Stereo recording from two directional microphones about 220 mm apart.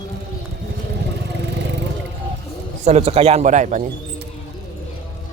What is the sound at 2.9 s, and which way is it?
Speech, 30° right (ahead or behind).